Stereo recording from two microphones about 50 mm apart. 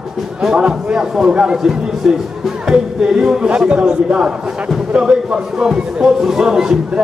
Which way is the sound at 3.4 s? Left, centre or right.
Right.